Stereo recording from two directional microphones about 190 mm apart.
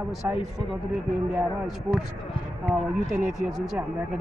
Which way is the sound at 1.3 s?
Centre (ahead or behind).